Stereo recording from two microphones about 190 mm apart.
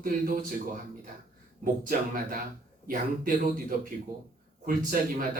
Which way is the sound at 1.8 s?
50° right (ahead or behind).